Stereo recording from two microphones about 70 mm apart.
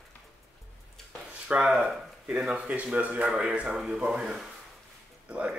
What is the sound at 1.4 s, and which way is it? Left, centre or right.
Speech, centre.